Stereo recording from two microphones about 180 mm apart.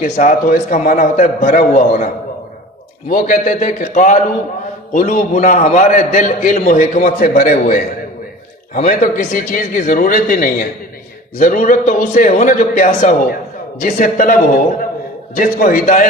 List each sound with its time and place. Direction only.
0.0 s a man's voice: 45° left (ahead or behind)
3.1 s a man's voice: 50° left (ahead or behind)